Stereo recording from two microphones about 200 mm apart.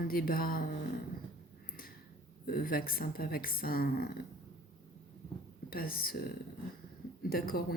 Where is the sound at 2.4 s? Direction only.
45° left (ahead or behind).